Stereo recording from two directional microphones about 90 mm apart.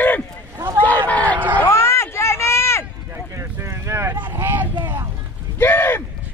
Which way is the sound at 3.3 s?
30° right (ahead or behind).